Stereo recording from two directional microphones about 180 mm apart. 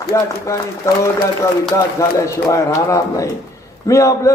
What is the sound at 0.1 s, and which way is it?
A man's voice, 15° left (ahead or behind).